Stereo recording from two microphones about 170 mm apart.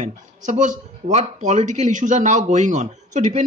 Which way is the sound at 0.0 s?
45° right (ahead or behind).